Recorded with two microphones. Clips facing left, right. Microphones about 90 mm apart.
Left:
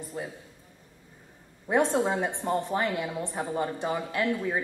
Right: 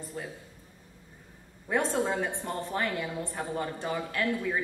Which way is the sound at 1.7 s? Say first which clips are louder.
Left 4 dB; 20° left (ahead or behind).